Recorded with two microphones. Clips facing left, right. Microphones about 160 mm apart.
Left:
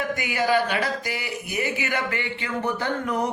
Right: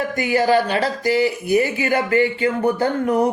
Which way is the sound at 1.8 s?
30° right (ahead or behind).